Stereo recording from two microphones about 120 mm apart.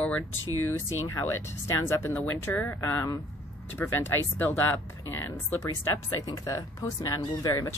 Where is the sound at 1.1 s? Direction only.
25° left (ahead or behind).